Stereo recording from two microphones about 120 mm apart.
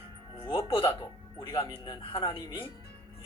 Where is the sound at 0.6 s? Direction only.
45° left (ahead or behind).